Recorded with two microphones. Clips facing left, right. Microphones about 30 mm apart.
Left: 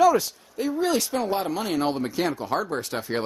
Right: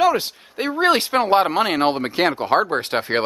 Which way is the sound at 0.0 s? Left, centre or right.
Right.